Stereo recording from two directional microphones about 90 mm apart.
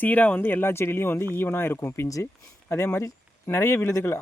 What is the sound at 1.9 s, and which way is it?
Speech, 35° left (ahead or behind).